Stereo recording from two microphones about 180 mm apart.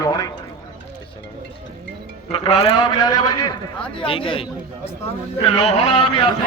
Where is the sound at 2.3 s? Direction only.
25° left (ahead or behind).